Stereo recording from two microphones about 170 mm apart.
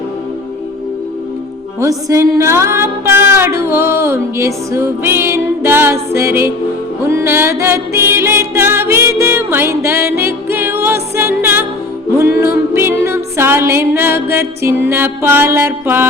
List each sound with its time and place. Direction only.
1.8 s music: 20° right (ahead or behind)
12.7 s music: 15° right (ahead or behind)